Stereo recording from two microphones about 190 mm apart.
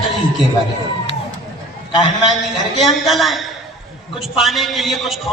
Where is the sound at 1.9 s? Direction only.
25° left (ahead or behind).